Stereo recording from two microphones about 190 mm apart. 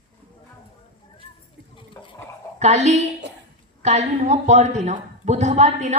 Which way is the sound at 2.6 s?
35° right (ahead or behind).